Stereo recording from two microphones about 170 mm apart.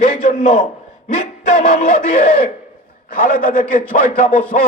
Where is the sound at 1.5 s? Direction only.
40° left (ahead or behind).